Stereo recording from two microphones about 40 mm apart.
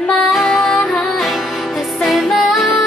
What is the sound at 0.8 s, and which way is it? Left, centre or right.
Music, centre.